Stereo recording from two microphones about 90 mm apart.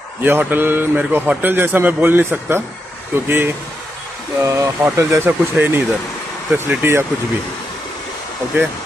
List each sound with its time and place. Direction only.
0.2 s speech: 20° right (ahead or behind)
4.4 s speech: 35° right (ahead or behind)